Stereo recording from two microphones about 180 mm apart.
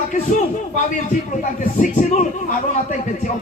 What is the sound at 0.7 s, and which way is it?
Speech, 45° left (ahead or behind).